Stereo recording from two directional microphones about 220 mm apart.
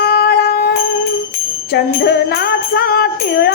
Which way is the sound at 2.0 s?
45° left (ahead or behind).